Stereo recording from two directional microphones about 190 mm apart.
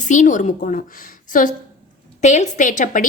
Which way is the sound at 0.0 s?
40° left (ahead or behind).